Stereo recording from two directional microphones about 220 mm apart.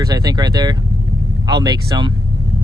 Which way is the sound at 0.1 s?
20° right (ahead or behind).